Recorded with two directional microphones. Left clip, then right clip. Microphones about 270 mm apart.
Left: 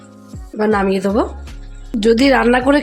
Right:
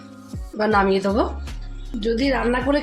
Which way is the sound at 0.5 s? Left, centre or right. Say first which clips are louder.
Left 2 dB; left.